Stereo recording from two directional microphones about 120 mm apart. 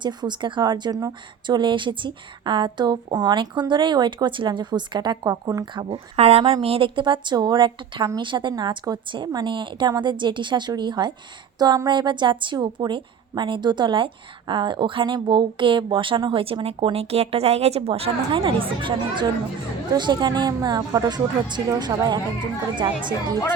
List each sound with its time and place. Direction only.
0.0 s a woman's voice: 40° right (ahead or behind)
5.7 s a woman's voice: 55° right (ahead or behind); by 22.2 s 35° right (ahead or behind)